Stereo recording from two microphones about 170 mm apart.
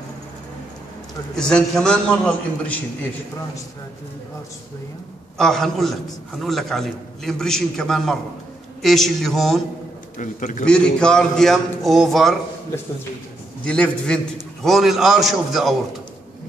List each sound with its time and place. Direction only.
1.3 s a man's voice: 5° left (ahead or behind)
5.4 s a man's voice: centre (ahead or behind)
10.1 s a man's voice: 50° left (ahead or behind)
10.6 s a man's voice: 5° left (ahead or behind)
13.7 s a man's voice: 5° left (ahead or behind)